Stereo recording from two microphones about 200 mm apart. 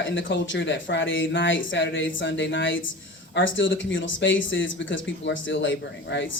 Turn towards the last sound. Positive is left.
turn(degrees=65)  # may be behind; listen again after turning